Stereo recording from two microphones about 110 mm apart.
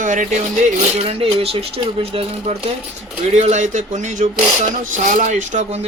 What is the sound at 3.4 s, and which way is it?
Speech, 90° right.